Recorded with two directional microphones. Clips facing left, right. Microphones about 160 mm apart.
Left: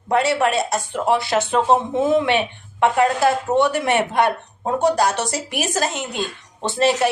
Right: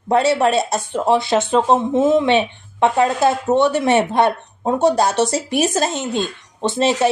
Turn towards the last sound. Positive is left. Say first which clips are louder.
# right 2 dB
turn(degrees=-20)  # may be behind; listen again after turning